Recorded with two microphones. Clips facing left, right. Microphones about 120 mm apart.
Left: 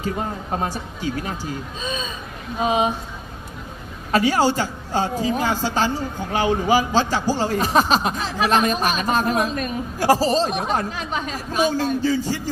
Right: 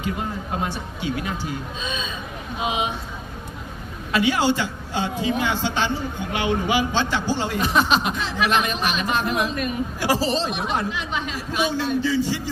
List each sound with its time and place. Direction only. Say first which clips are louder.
0.0 s a woman's voice: left 2 dB; 40° left (ahead or behind)
4.1 s a woman's voice: left 2 dB; 40° left (ahead or behind)